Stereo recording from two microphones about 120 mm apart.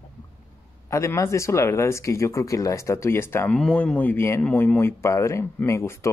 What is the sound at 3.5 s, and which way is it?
Speech, 5° left (ahead or behind).